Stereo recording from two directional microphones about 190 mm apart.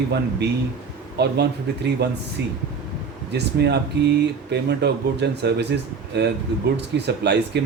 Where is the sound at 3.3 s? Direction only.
60° right (ahead or behind).